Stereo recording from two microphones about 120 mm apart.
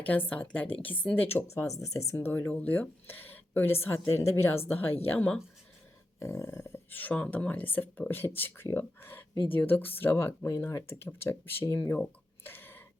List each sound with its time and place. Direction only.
0.1 s speech: 15° left (ahead or behind)
1.8 s speech: 25° left (ahead or behind)
5.1 s speech: 10° left (ahead or behind)
6.1 s speech: 25° left (ahead or behind)
11.6 s speech: 30° left (ahead or behind)
12.4 s a sound: 20° left (ahead or behind)